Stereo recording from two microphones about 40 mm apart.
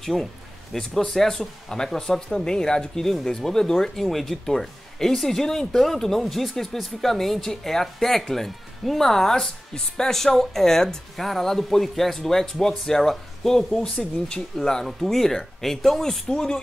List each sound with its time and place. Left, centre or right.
0.0 s speech: centre